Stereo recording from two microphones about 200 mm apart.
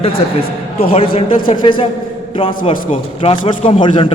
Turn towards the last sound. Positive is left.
turn(degrees=25)  # may be behind; listen again after turning